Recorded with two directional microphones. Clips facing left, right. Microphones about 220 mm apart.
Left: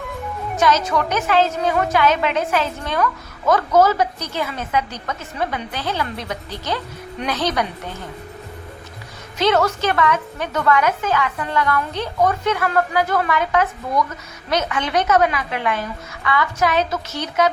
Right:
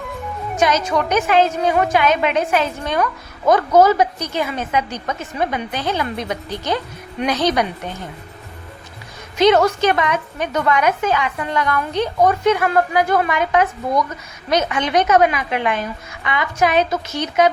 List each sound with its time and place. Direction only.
0.5 s a woman's voice: 15° right (ahead or behind)
9.4 s a woman's voice: 15° right (ahead or behind)